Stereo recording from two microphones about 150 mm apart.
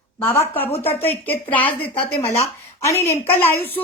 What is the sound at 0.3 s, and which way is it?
A woman's voice, 15° left (ahead or behind).